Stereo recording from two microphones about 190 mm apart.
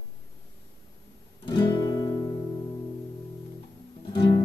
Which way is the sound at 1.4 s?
25° left (ahead or behind).